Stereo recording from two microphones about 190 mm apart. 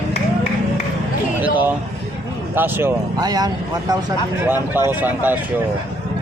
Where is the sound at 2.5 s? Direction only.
10° right (ahead or behind).